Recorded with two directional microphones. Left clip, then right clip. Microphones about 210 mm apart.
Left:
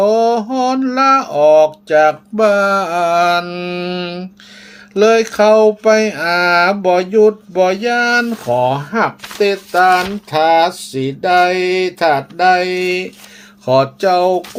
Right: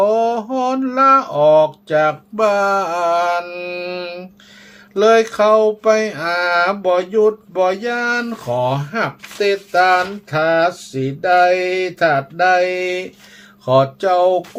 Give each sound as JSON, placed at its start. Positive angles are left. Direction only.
{"t": 0.0, "sound": "mantra", "side_deg": 25}
{"t": 4.9, "sound": "speech", "side_deg": 25}